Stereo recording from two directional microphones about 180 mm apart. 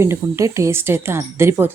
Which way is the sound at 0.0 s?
15° right (ahead or behind).